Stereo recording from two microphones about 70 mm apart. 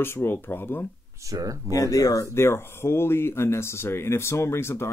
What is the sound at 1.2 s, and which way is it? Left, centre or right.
Speech, right.